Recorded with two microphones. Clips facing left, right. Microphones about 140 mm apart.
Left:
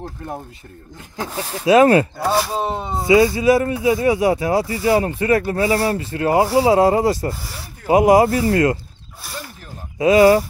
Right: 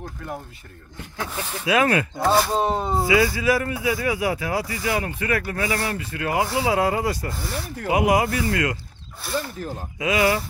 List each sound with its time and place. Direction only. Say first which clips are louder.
1.1 s speech: left 4 dB; 35° left (ahead or behind)
2.1 s speech: even; 5° left (ahead or behind)
3.1 s speech: left 8 dB; 25° left (ahead or behind)
9.9 s speech: left 10 dB; 35° left (ahead or behind)